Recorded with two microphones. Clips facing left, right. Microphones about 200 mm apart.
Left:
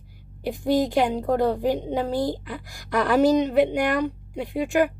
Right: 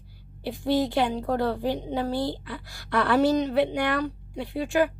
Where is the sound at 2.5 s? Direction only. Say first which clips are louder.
Left 2 dB; 15° left (ahead or behind).